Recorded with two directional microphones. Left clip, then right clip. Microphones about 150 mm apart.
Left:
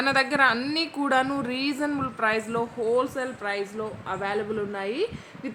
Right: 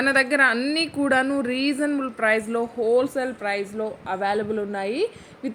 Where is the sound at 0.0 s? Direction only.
15° right (ahead or behind).